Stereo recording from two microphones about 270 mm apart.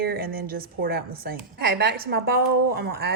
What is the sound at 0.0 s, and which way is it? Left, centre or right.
A woman's voice, right.